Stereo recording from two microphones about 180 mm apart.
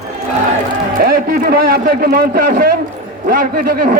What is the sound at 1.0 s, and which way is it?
A man's voice, 55° right (ahead or behind).